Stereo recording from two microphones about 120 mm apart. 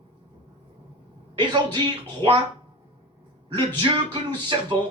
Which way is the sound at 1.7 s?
40° right (ahead or behind).